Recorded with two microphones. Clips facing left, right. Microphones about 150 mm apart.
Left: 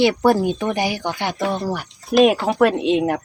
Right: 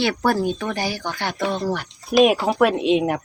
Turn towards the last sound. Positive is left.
turn(degrees=0)  # may be behind; listen again after turning